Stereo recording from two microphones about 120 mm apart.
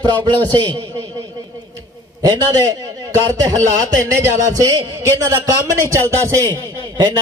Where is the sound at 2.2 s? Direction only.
35° right (ahead or behind).